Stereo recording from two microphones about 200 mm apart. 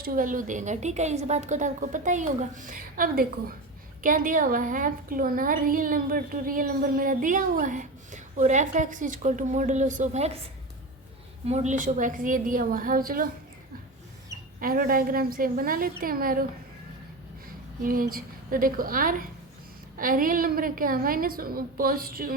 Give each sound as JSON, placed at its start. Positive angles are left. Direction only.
{"t": 0.0, "sound": "a woman's voice", "side_deg": -45}
{"t": 11.4, "sound": "a woman's voice", "side_deg": -35}
{"t": 14.6, "sound": "a woman's voice", "side_deg": -45}
{"t": 17.8, "sound": "a woman's voice", "side_deg": -45}